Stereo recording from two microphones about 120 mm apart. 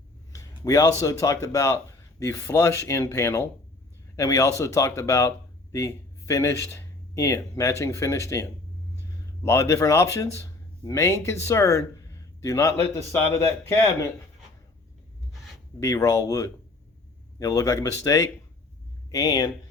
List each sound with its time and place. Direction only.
0.3 s a sound: 25° left (ahead or behind)
1.0 s a man's voice: 25° left (ahead or behind)
15.8 s speech: 25° left (ahead or behind)